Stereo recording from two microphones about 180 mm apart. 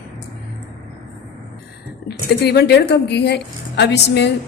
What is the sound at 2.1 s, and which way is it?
A woman's voice, 65° left (ahead or behind).